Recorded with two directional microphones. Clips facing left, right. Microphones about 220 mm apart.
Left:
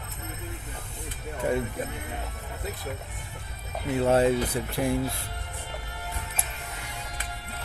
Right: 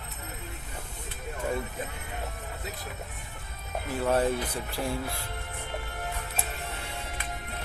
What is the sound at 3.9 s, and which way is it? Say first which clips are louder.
Speech: left 4 dB; 25° left (ahead or behind).